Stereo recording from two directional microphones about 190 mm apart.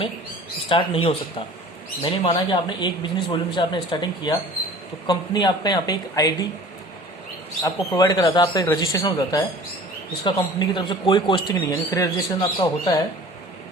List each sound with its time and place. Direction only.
0.7 s speech: 25° left (ahead or behind)
7.6 s speech: 20° left (ahead or behind)